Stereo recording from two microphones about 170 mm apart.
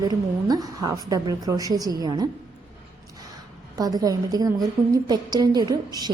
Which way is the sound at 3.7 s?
20° right (ahead or behind).